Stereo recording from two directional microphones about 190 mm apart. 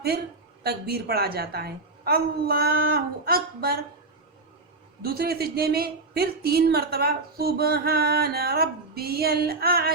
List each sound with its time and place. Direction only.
0.6 s speech: 55° right (ahead or behind)
5.0 s speech: 55° right (ahead or behind)